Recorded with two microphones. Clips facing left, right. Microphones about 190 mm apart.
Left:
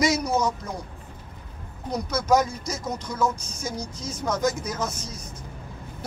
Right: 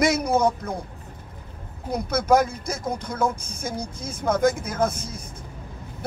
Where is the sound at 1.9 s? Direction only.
55° right (ahead or behind).